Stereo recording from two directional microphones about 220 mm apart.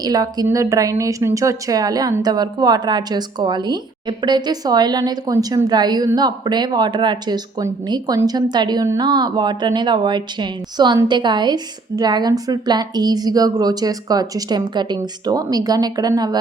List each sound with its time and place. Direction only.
0.0 s a woman's voice: 15° right (ahead or behind)